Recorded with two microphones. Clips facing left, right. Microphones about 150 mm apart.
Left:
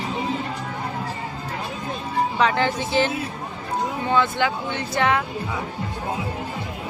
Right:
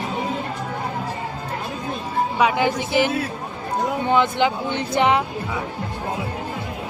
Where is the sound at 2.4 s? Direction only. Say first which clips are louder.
Right 3 dB; 10° right (ahead or behind).